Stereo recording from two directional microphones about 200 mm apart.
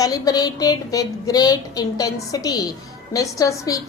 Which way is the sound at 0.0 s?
20° left (ahead or behind).